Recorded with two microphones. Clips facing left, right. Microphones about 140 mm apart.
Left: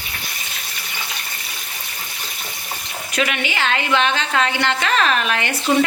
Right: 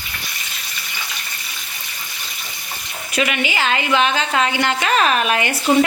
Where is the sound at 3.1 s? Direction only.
5° right (ahead or behind).